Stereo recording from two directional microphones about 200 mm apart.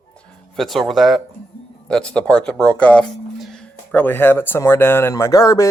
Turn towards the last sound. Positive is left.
turn(degrees=15)  # may be behind; listen again after turning